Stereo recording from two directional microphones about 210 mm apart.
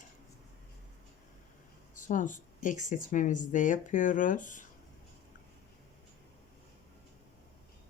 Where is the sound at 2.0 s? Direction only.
40° left (ahead or behind).